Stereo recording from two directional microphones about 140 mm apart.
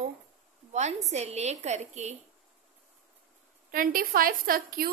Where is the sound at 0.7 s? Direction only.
55° right (ahead or behind).